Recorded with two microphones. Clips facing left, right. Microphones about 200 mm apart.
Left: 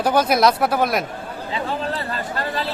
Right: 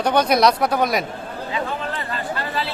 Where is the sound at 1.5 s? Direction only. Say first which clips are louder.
Left 2 dB; 30° left (ahead or behind).